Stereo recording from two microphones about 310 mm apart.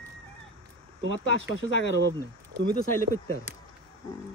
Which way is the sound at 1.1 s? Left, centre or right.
Left.